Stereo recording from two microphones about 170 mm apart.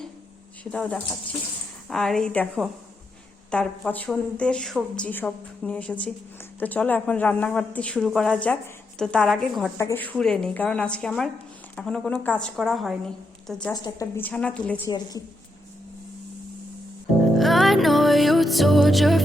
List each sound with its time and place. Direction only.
0.6 s a woman's voice: 5° left (ahead or behind)
13.7 s a woman's voice: 25° left (ahead or behind)
14.2 s a woman's voice: 10° left (ahead or behind)
14.8 s a woman's voice: 20° left (ahead or behind)
17.3 s music: centre (ahead or behind)